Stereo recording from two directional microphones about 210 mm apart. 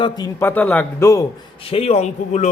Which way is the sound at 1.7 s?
30° left (ahead or behind).